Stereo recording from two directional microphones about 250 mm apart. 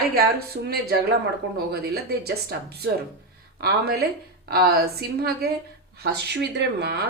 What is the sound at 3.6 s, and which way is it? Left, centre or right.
Speech, right.